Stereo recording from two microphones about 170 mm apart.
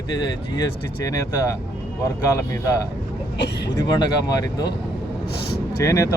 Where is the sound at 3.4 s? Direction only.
85° left.